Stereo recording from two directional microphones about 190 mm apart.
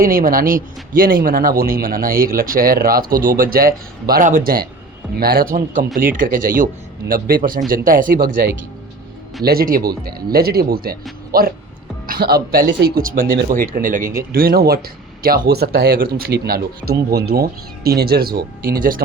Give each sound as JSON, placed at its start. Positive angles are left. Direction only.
{"t": 0.0, "sound": "a man's voice", "side_deg": -50}